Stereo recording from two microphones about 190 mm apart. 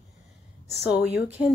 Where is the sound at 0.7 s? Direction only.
5° right (ahead or behind).